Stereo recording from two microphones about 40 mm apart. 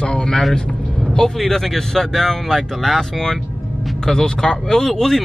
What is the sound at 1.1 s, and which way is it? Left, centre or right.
Speech, centre.